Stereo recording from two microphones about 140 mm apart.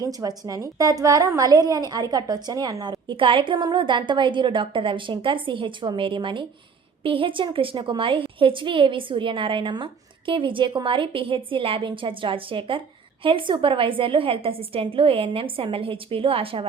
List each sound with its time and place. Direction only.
0.0 s a woman's voice: 25° right (ahead or behind); by 16.6 s 40° right (ahead or behind)